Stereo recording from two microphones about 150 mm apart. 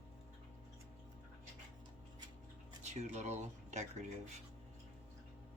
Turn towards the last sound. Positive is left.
turn(degrees=-50)  # may be behind; listen again after turning